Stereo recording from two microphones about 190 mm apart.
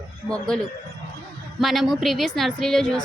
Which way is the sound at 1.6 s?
Centre (ahead or behind).